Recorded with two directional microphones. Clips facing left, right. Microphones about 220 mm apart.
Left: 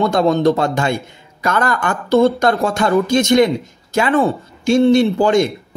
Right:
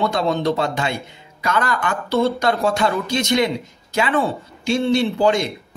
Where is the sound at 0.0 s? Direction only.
45° left (ahead or behind).